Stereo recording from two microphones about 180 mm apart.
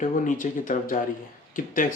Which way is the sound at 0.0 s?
45° left (ahead or behind).